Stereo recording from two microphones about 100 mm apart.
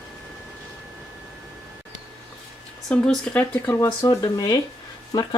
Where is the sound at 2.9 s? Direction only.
10° left (ahead or behind).